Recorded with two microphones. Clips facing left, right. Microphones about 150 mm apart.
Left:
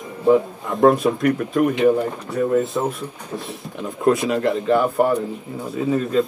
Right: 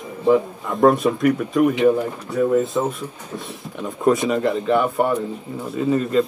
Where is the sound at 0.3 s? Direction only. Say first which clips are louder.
Left 1 dB; centre (ahead or behind).